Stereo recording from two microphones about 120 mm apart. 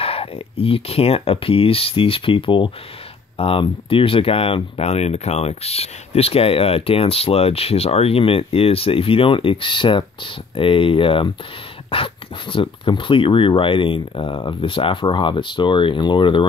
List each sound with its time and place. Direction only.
0.0 s speech: 55° left (ahead or behind)